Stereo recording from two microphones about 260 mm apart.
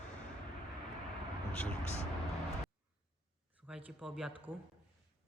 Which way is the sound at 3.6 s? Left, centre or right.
Centre.